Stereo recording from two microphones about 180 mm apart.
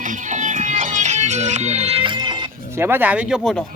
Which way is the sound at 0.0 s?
45° right (ahead or behind).